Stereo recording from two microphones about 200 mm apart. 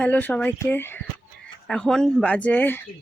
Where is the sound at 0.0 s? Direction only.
10° left (ahead or behind).